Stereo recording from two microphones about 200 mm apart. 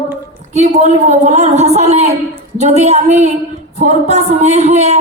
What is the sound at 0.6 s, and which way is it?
A woman's voice, 35° right (ahead or behind).